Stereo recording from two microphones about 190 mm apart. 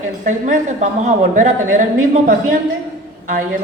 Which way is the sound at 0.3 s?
40° right (ahead or behind).